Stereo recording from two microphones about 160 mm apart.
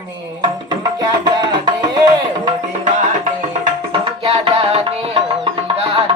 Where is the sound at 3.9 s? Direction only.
40° right (ahead or behind).